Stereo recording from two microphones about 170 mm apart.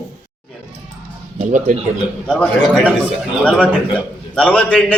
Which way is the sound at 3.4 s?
5° left (ahead or behind).